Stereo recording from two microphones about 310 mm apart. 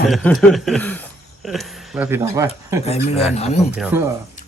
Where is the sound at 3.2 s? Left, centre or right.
Centre.